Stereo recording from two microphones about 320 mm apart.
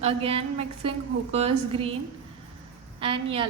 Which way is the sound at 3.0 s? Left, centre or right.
Centre.